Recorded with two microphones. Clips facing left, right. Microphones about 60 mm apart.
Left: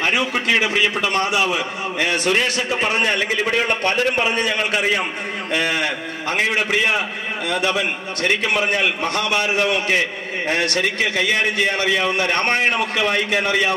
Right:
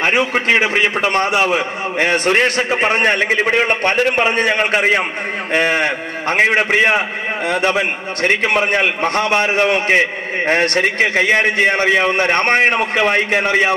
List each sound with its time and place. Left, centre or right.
0.0 s a man's voice: right